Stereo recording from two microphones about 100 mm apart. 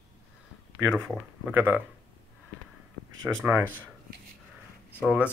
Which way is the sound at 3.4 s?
20° right (ahead or behind).